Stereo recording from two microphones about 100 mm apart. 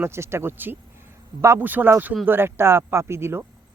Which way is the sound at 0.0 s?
25° right (ahead or behind).